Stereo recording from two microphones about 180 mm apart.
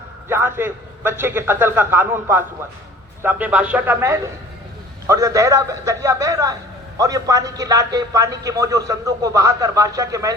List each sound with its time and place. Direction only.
0.3 s a man's voice: 10° right (ahead or behind)